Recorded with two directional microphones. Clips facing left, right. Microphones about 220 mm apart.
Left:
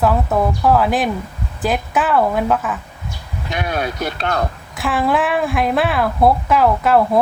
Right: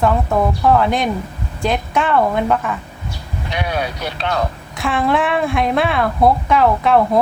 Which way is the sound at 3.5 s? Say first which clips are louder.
Even; 50° left (ahead or behind).